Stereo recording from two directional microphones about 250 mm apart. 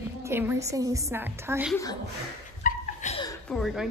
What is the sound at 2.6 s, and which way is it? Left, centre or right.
Chuckle, left.